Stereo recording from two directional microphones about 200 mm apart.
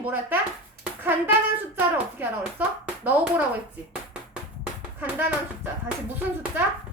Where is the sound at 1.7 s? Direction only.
10° right (ahead or behind).